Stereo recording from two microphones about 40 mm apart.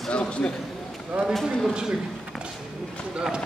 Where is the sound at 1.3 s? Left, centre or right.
Centre.